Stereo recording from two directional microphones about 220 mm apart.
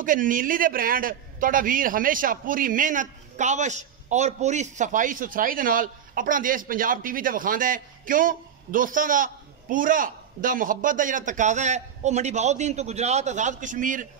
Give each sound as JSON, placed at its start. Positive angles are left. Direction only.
{"t": 0.0, "sound": "a man's voice", "side_deg": -35}